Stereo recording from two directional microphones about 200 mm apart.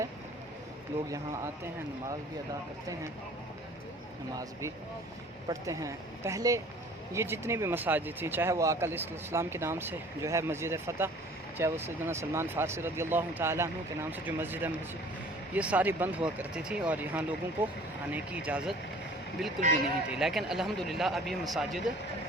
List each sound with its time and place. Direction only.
0.9 s speech: 10° right (ahead or behind)
5.5 s speech: 15° right (ahead or behind); by 21.8 s centre (ahead or behind)